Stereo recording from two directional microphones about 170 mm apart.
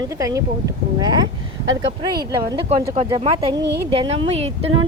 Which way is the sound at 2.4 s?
30° right (ahead or behind).